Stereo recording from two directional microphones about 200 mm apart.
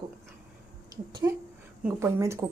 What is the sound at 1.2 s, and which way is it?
Speech, 15° right (ahead or behind).